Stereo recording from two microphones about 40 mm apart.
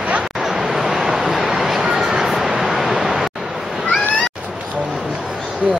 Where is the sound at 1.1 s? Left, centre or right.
Centre.